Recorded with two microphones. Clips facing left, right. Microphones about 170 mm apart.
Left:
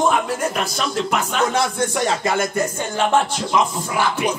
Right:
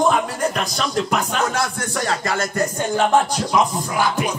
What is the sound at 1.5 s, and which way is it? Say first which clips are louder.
Music: left 3 dB; 20° left (ahead or behind).